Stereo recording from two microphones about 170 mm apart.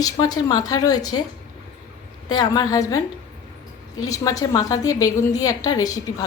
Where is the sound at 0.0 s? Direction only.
20° left (ahead or behind).